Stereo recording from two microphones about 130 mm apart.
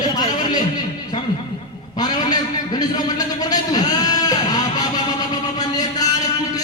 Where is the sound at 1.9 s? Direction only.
30° left (ahead or behind).